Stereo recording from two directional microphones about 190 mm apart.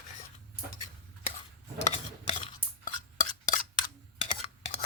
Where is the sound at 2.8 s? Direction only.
45° left (ahead or behind).